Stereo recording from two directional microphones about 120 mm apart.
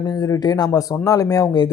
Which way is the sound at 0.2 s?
30° left (ahead or behind).